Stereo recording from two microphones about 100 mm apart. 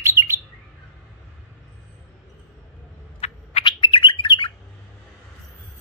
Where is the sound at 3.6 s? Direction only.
60° left (ahead or behind).